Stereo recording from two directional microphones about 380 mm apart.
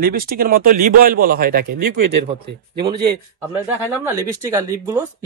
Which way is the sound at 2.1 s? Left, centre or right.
Right.